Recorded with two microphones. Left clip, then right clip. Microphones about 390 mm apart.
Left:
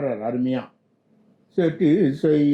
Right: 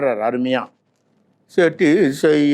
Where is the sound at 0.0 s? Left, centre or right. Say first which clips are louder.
Right 6 dB; centre.